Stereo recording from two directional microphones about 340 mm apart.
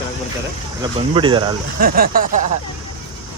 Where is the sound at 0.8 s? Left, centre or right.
Centre.